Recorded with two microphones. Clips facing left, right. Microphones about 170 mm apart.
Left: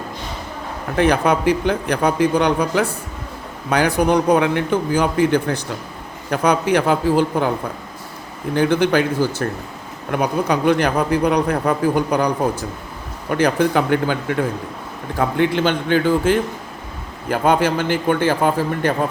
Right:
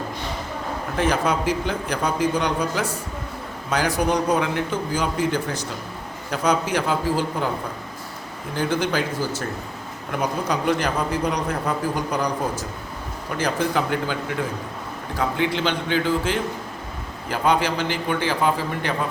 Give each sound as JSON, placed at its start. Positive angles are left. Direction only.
{"t": 0.9, "sound": "a man's voice", "side_deg": 60}
{"t": 8.5, "sound": "a man's voice", "side_deg": 60}